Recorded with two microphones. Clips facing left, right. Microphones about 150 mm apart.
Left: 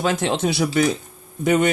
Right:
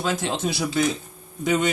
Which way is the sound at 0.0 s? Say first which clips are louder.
Left 4 dB; 65° left (ahead or behind).